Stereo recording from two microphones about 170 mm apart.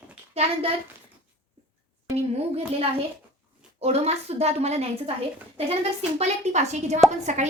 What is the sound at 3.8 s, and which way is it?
A woman's voice, 40° right (ahead or behind).